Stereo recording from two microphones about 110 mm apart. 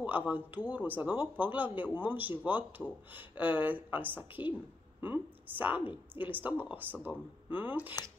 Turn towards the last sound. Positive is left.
turn(degrees=-15)  # may be behind; listen again after turning